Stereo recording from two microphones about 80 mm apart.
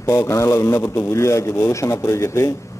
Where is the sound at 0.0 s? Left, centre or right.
Left.